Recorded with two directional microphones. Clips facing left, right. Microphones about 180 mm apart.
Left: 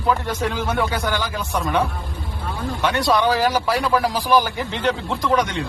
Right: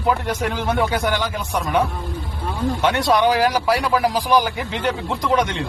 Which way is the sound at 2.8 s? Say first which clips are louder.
Right 1 dB; 20° right (ahead or behind).